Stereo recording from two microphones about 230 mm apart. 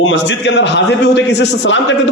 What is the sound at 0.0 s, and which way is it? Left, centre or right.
A man's voice, left.